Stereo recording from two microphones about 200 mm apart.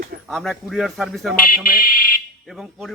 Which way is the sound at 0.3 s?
Centre (ahead or behind).